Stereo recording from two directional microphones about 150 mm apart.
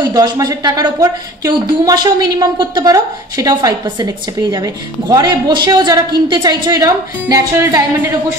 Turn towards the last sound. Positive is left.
turn(degrees=-20)  # may be behind; listen again after turning